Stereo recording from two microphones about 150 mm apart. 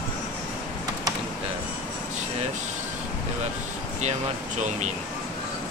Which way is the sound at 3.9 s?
50° right (ahead or behind).